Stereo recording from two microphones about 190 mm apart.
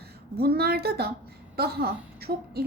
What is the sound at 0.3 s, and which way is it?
A woman's voice, 55° right (ahead or behind).